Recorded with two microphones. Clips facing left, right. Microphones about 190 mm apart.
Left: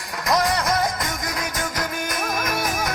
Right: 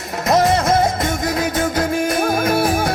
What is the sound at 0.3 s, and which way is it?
Music, 25° right (ahead or behind).